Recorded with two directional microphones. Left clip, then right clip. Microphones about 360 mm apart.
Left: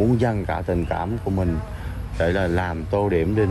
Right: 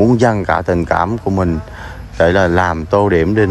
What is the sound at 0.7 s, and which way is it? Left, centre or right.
Speech, right.